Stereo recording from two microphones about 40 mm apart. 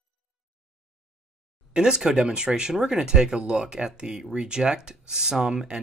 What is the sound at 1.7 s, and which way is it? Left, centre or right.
Speech, right.